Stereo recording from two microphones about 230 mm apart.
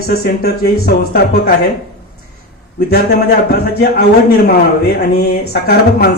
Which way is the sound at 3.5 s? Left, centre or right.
Left.